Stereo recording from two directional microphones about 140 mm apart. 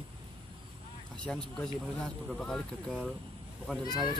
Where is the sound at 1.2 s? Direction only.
5° left (ahead or behind).